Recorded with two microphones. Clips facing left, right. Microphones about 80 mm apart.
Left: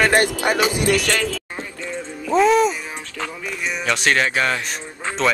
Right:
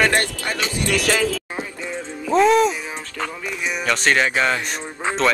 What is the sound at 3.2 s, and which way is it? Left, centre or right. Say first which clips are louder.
Speech: right 1 dB; centre.